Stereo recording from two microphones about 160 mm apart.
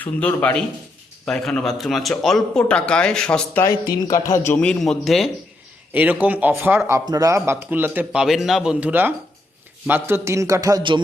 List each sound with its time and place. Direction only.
0.0 s a man's voice: 10° left (ahead or behind)
3.7 s a man's voice: 25° left (ahead or behind)
4.5 s a man's voice: 5° left (ahead or behind); by 11.0 s 25° right (ahead or behind)